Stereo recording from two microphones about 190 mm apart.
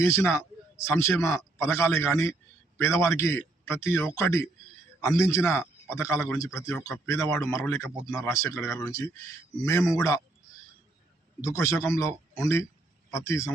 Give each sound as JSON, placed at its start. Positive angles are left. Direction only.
{"t": 0.0, "sound": "a man's voice", "side_deg": 15}
{"t": 11.4, "sound": "a man's voice", "side_deg": 15}